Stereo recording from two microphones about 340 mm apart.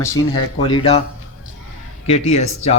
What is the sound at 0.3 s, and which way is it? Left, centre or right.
Speech, centre.